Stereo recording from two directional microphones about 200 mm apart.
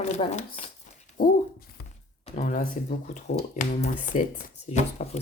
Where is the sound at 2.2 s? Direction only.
35° left (ahead or behind).